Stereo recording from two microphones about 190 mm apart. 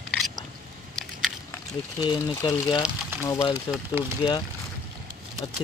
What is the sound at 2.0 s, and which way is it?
Speech, 20° left (ahead or behind).